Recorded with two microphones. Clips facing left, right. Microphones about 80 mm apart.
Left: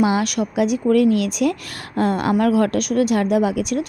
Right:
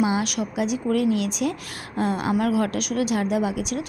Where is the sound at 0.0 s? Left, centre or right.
Left.